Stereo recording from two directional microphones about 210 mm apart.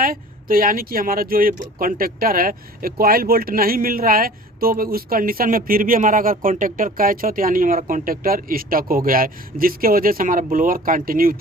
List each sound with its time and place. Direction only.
0.0 s speech: 45° right (ahead or behind)